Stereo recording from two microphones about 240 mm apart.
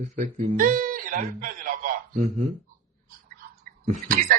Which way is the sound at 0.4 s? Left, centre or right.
Right.